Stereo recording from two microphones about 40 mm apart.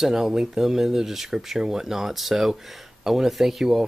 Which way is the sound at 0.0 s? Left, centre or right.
Centre.